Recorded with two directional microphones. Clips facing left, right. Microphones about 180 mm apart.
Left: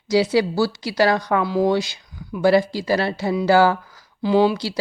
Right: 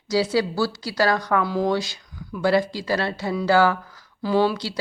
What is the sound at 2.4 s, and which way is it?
Speech, 25° left (ahead or behind).